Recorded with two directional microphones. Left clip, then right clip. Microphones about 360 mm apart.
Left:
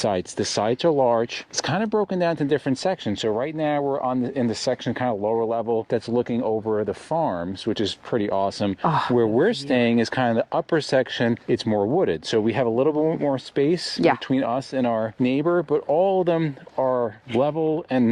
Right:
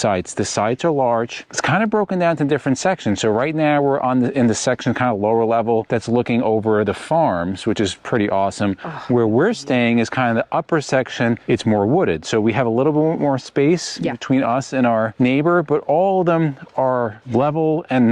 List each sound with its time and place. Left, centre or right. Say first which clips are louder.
0.0 s speech: right 4 dB; right
8.8 s speech: left 9 dB; centre
9.1 s speech: right 9 dB; right